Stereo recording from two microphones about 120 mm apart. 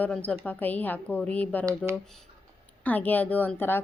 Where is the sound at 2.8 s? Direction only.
15° left (ahead or behind).